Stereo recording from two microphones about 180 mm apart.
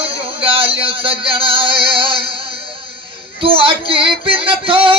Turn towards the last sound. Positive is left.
turn(degrees=-30)  # may be behind; listen again after turning